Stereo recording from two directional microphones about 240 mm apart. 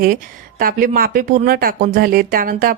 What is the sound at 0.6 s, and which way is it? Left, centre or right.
Speech, right.